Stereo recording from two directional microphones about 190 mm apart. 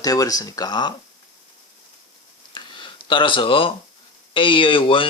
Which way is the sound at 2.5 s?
25° left (ahead or behind).